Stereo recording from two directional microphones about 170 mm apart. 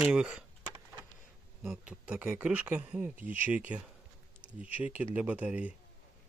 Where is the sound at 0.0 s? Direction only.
5° right (ahead or behind).